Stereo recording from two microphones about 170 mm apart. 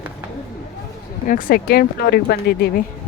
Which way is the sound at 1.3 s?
55° left (ahead or behind).